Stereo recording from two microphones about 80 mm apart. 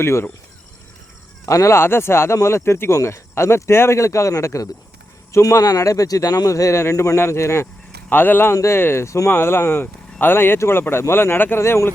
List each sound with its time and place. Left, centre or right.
0.0 s speech: left
1.5 s speech: left
9.3 s speech: left